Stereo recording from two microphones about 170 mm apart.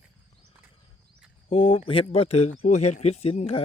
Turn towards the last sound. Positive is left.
turn(degrees=35)  # may be behind; listen again after turning